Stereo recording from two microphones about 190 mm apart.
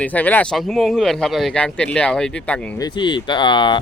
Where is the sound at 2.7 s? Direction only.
20° left (ahead or behind).